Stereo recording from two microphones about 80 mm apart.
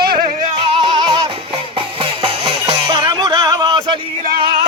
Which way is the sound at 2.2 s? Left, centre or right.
Right.